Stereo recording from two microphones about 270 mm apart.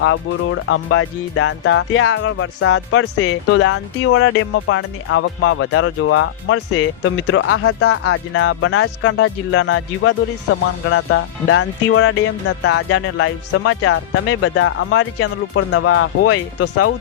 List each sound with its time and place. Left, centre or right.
0.0 s speech: left